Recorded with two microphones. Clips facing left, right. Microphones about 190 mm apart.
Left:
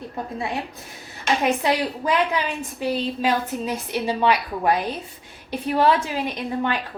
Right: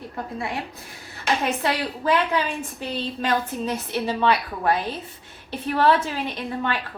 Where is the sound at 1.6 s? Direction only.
15° left (ahead or behind).